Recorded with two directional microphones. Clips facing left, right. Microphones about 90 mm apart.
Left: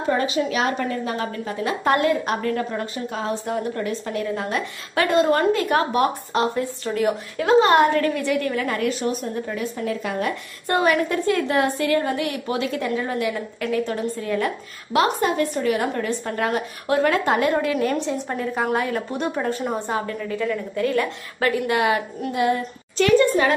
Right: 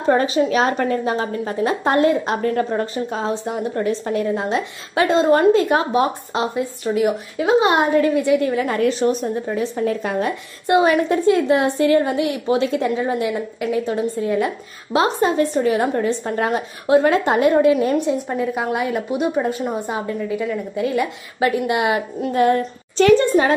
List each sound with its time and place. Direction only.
0.0 s a woman's voice: 35° right (ahead or behind); by 7.5 s 5° right (ahead or behind)
7.6 s a woman's voice: 15° right (ahead or behind); by 10.3 s 35° right (ahead or behind)
10.7 s a woman's voice: 25° right (ahead or behind)
17.9 s a woman's voice: 10° right (ahead or behind)
22.3 s a woman's voice: 40° right (ahead or behind)